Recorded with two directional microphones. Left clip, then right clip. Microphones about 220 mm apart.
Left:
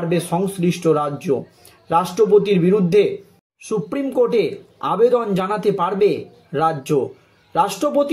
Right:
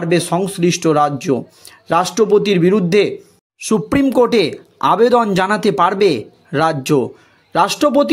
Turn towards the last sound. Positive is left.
turn(degrees=-40)  # may be behind; listen again after turning